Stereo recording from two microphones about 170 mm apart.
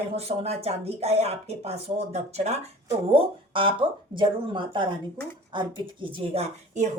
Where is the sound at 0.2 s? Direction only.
35° right (ahead or behind).